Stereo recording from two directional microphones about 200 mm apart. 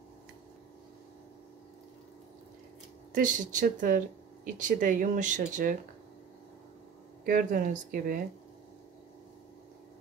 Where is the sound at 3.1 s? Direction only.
40° right (ahead or behind).